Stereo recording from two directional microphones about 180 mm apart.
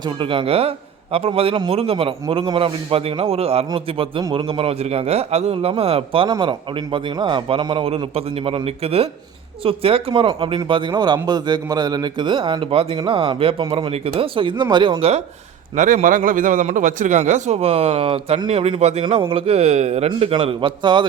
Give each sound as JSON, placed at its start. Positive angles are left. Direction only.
{"t": 0.0, "sound": "a man's voice", "side_deg": -30}
{"t": 15.7, "sound": "a man's voice", "side_deg": -45}